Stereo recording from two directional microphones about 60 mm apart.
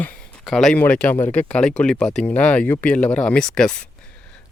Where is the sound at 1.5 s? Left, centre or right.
Centre.